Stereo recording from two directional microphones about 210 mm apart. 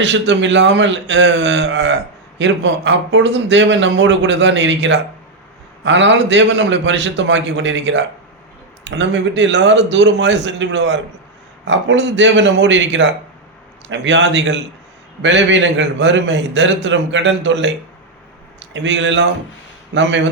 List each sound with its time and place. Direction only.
0.0 s a man's voice: 60° right (ahead or behind)
18.7 s a man's voice: 60° right (ahead or behind)